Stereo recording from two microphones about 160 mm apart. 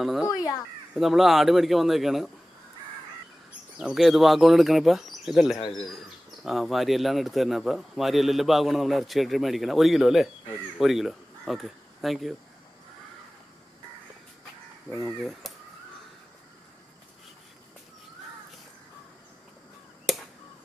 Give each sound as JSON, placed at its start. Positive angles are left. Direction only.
{"t": 0.0, "sound": "a man's voice", "side_deg": 0}
{"t": 3.8, "sound": "a man's voice", "side_deg": 0}
{"t": 5.6, "sound": "speech", "side_deg": 30}
{"t": 6.4, "sound": "a man's voice", "side_deg": 0}
{"t": 15.0, "sound": "a man's voice", "side_deg": 0}
{"t": 20.1, "sound": "a sound", "side_deg": 0}